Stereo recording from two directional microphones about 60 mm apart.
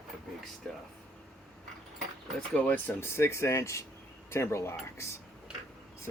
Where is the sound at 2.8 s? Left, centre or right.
Left.